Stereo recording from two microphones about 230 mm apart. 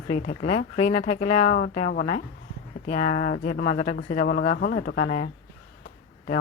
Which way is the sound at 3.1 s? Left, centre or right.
Left.